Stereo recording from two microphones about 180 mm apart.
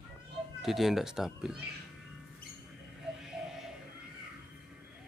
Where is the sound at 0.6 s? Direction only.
Centre (ahead or behind).